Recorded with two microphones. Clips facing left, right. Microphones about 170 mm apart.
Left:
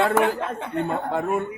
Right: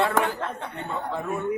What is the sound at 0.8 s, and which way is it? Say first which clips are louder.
Speech: left 2 dB; 55° left (ahead or behind).